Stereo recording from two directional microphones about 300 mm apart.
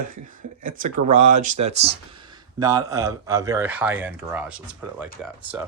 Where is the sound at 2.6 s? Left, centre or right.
Centre.